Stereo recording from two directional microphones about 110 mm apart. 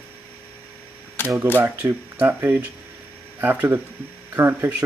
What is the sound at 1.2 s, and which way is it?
Camera, 20° left (ahead or behind).